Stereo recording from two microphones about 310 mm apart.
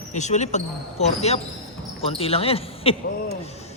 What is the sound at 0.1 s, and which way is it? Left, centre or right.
Speech, left.